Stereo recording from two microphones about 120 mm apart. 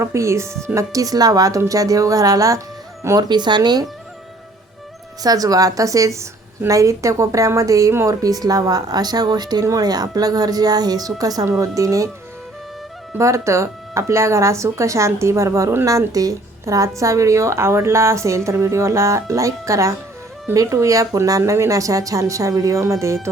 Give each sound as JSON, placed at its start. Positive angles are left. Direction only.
{"t": 0.0, "sound": "a woman's voice", "side_deg": -25}
{"t": 3.2, "sound": "speech", "side_deg": -40}
{"t": 5.2, "sound": "a woman's voice", "side_deg": -30}
{"t": 13.1, "sound": "a woman's voice", "side_deg": -25}